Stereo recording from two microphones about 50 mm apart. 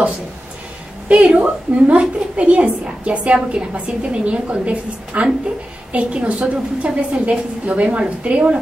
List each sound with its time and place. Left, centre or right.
1.0 s a woman's voice: right